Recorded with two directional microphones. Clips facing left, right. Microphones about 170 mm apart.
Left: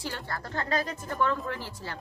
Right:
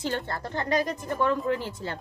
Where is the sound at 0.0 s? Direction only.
20° right (ahead or behind).